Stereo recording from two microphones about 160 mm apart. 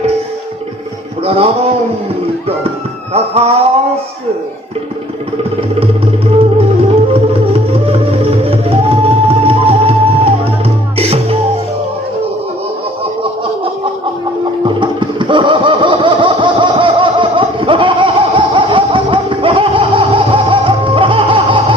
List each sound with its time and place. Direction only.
1.2 s a man's voice: 40° right (ahead or behind)
3.1 s speech: 40° right (ahead or behind)
6.4 s flute: 35° right (ahead or behind)
8.4 s music: 35° right (ahead or behind)
10.9 s music: 40° right (ahead or behind)
14.6 s a sound: 30° right (ahead or behind)